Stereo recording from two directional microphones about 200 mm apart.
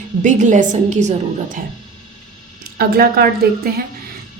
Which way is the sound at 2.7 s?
50° right (ahead or behind).